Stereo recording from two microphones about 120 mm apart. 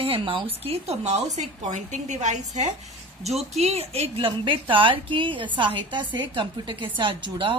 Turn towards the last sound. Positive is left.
turn(degrees=-45)  # may be behind; listen again after turning